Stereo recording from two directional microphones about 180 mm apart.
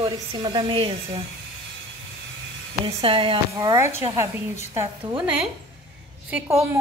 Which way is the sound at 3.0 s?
30° right (ahead or behind).